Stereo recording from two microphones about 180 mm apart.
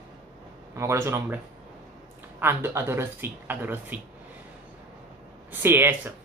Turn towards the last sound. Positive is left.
turn(degrees=-10)  # may be behind; listen again after turning